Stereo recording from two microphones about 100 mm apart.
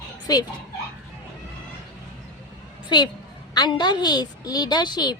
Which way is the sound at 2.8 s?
45° left (ahead or behind).